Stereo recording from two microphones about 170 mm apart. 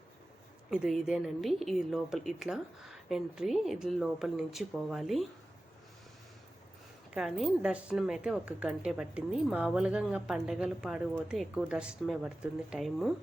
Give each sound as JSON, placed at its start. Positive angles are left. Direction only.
{"t": 0.7, "sound": "speech", "side_deg": -5}
{"t": 7.1, "sound": "speech", "side_deg": 0}